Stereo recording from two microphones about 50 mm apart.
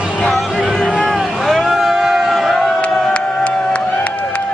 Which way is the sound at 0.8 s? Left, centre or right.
Left.